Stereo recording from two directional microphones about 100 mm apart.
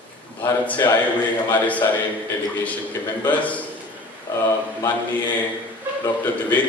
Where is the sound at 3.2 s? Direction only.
15° left (ahead or behind).